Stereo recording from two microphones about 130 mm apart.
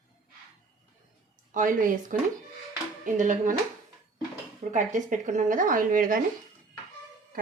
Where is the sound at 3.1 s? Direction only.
80° right.